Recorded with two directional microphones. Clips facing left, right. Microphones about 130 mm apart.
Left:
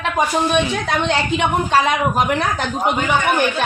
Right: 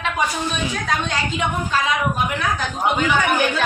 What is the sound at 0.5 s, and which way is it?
A woman's voice, 70° left (ahead or behind).